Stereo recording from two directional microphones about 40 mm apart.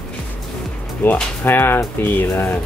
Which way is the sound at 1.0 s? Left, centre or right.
Left.